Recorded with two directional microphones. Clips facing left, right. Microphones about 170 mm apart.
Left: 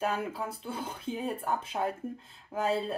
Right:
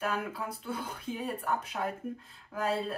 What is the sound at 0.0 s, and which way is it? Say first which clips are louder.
A woman's voice: left 2 dB; 30° left (ahead or behind).